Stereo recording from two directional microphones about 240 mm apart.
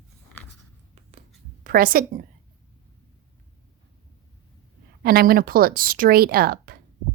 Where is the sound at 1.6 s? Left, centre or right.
Right.